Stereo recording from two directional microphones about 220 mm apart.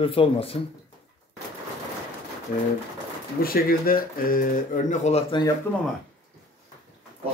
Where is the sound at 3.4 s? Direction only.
40° left (ahead or behind).